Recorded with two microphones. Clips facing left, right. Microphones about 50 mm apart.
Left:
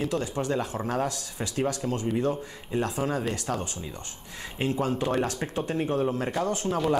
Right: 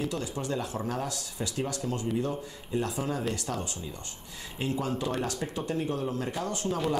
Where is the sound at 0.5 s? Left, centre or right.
Left.